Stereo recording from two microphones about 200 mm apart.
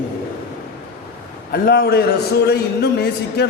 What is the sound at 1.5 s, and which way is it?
A man's voice, 50° left (ahead or behind).